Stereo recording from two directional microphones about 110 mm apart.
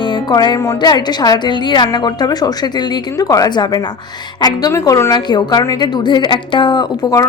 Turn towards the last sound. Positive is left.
turn(degrees=40)  # may be behind; listen again after turning